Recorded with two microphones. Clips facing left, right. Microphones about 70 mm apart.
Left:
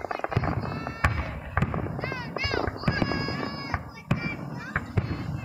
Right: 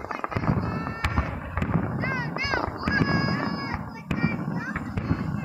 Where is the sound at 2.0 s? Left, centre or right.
Right.